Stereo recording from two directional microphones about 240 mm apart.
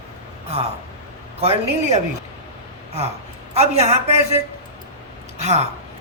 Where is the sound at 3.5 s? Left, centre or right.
Right.